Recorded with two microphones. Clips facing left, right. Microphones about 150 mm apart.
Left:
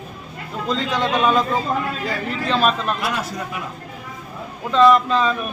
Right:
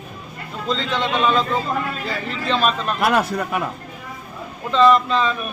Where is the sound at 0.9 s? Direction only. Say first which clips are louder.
Left 1 dB; 10° left (ahead or behind).